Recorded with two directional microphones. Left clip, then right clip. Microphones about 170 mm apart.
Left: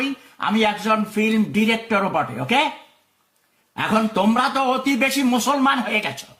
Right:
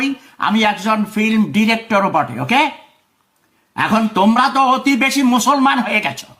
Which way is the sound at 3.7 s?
20° right (ahead or behind).